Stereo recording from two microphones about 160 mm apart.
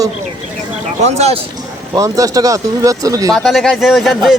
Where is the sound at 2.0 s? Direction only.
20° right (ahead or behind).